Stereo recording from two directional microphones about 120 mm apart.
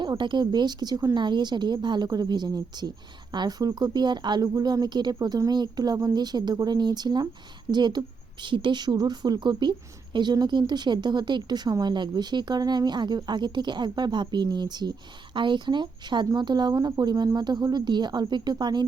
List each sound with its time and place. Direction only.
0.0 s a woman's voice: 40° right (ahead or behind)